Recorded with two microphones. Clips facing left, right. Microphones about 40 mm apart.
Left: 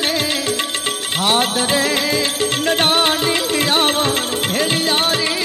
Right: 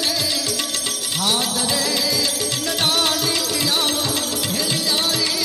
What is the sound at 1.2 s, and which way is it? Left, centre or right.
Music, left.